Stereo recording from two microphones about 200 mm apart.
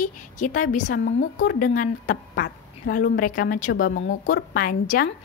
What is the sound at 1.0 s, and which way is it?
A woman's voice, 50° left (ahead or behind).